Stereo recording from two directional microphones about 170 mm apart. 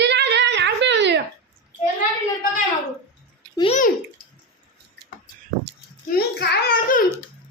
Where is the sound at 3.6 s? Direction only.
35° left (ahead or behind).